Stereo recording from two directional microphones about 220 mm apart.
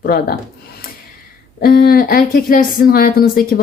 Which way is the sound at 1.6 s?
45° left (ahead or behind).